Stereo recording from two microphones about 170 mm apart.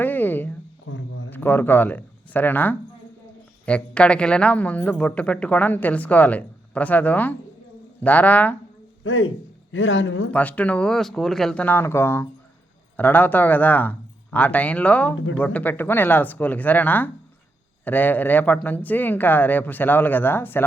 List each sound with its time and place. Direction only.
0.0 s a sound: 10° left (ahead or behind)
1.3 s a woman's voice: 10° left (ahead or behind)
9.8 s speech: 90° left
10.3 s a woman's voice: 10° left (ahead or behind)